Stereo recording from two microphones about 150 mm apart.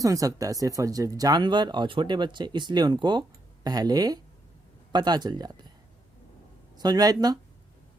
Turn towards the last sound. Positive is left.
turn(degrees=-25)  # may be behind; listen again after turning